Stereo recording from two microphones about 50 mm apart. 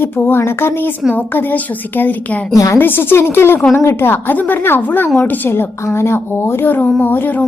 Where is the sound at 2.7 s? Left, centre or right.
Left.